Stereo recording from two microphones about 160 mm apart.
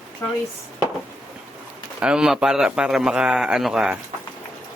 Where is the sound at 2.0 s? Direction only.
5° right (ahead or behind).